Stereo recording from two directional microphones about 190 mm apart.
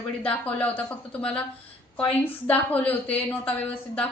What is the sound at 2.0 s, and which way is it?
A woman's voice, 10° left (ahead or behind).